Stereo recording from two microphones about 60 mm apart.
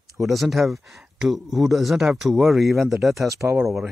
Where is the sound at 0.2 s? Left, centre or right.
Centre.